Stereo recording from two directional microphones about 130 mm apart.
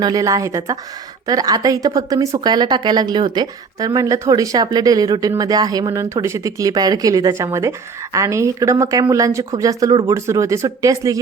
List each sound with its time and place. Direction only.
0.0 s a woman's voice: 25° right (ahead or behind)